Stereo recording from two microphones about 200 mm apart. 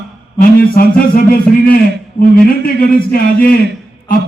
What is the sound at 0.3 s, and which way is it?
A man's voice, 45° left (ahead or behind).